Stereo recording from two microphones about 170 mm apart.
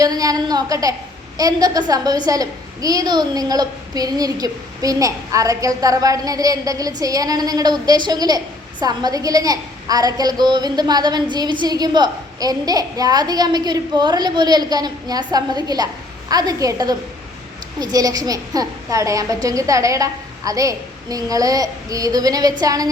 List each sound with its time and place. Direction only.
0.0 s a woman's voice: 20° right (ahead or behind)